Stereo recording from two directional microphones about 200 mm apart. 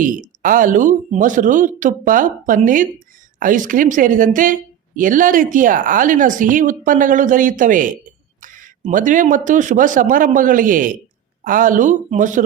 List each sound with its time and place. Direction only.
0.0 s speech: 40° right (ahead or behind)